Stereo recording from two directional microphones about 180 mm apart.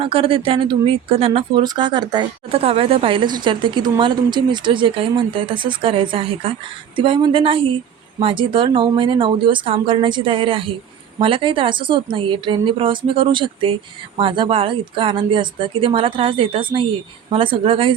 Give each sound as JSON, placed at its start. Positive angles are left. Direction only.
{"t": 0.0, "sound": "speech", "side_deg": -30}